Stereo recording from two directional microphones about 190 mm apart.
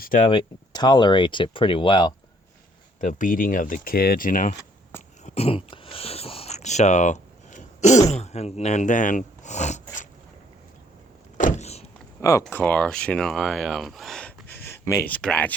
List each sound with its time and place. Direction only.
0.0 s speech: 45° left (ahead or behind)
0.3 s speech: 25° left (ahead or behind)
3.0 s speech: 45° left (ahead or behind)
5.2 s a sound: 35° left (ahead or behind)
8.1 s speech: 35° left (ahead or behind)
11.3 s vehicle: 40° left (ahead or behind)
12.2 s speech: 15° left (ahead or behind)